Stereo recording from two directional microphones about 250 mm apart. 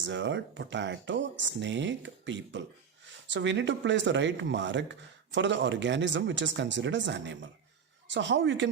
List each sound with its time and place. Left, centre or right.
0.0 s speech: right